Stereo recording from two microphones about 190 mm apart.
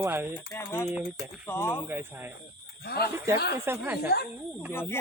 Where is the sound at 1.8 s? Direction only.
10° right (ahead or behind).